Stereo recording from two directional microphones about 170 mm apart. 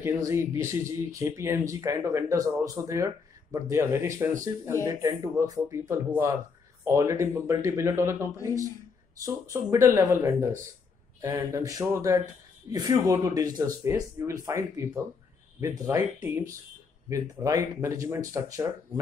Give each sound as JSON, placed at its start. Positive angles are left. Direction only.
{"t": 0.3, "sound": "speech", "side_deg": -15}